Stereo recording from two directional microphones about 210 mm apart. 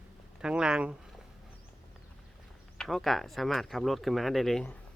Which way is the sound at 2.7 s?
Centre (ahead or behind).